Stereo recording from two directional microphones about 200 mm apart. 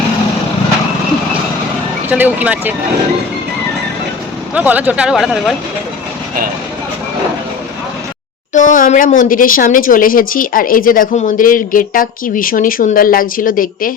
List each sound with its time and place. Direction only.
2.0 s speech: 10° right (ahead or behind)
4.5 s speech: 5° right (ahead or behind)
8.5 s speech: 40° left (ahead or behind)